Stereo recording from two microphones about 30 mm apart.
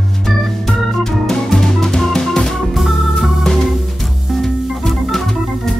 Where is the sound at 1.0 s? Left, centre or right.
Centre.